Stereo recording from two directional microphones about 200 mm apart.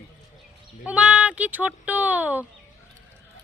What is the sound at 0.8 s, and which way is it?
Speech, 5° right (ahead or behind).